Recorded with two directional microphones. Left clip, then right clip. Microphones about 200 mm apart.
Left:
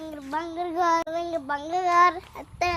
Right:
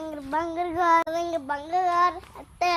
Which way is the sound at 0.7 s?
20° right (ahead or behind).